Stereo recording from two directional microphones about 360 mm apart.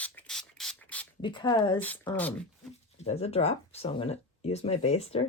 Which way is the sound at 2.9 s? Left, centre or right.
Centre.